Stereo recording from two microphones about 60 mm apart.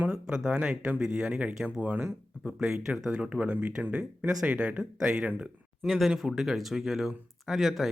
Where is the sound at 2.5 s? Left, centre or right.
Centre.